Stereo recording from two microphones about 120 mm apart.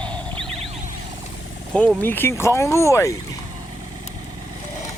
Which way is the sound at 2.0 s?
20° left (ahead or behind).